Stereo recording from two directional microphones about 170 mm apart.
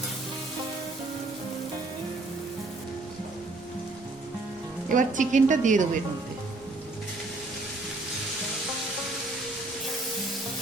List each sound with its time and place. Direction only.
4.9 s a woman's voice: 50° right (ahead or behind)